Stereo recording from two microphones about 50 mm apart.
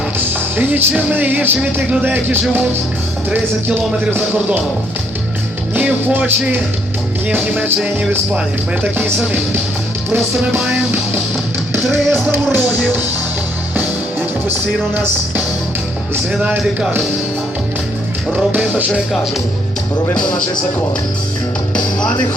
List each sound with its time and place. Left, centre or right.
0.2 s music: right
6.1 s music: right
11.9 s music: right
16.4 s music: centre
18.5 s music: right
20.1 s speech: centre